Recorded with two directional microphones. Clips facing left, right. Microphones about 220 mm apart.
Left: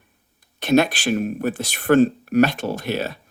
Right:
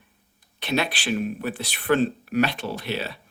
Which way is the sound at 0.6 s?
45° left (ahead or behind).